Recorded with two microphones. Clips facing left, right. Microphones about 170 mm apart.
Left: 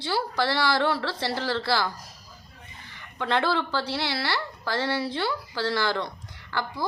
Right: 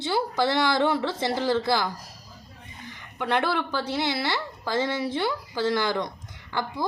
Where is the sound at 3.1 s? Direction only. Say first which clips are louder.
Even; 15° right (ahead or behind).